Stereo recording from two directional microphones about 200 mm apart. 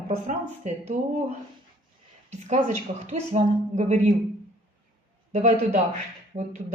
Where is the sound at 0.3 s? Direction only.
35° right (ahead or behind).